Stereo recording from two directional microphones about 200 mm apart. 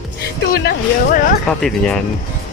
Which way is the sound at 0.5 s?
50° left (ahead or behind).